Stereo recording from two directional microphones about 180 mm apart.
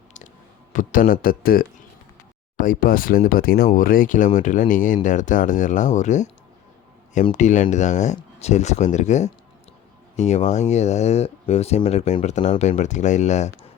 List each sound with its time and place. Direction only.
0.7 s speech: 45° left (ahead or behind)